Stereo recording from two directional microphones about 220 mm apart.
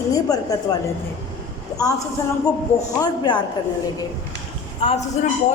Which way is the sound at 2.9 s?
20° left (ahead or behind).